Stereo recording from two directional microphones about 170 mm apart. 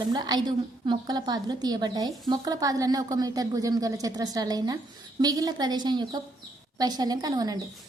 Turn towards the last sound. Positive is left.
turn(degrees=-25)  # may be behind; listen again after turning